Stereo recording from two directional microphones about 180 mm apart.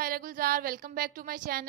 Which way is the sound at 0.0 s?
50° right (ahead or behind).